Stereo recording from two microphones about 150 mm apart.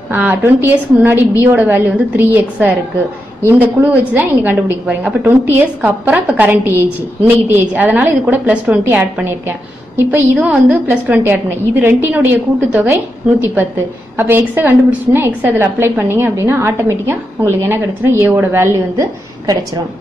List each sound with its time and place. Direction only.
0.1 s a woman's voice: 15° right (ahead or behind)